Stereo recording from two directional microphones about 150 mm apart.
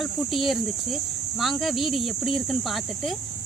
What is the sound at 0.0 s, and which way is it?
Speech, centre (ahead or behind).